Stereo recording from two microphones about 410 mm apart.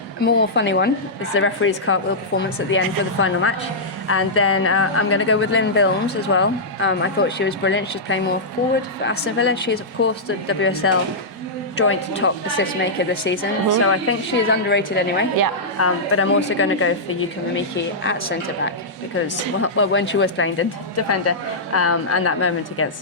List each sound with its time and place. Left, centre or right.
0.2 s a woman's voice: left
19.6 s speech: left